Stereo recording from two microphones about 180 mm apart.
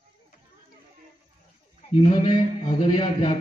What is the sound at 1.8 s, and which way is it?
A man's voice, 35° left (ahead or behind).